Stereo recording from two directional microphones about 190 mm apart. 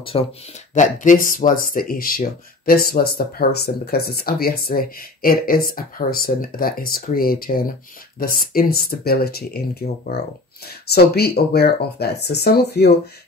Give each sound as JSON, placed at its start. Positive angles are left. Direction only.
{"t": 0.1, "sound": "speech", "side_deg": 25}
{"t": 0.7, "sound": "speech", "side_deg": 40}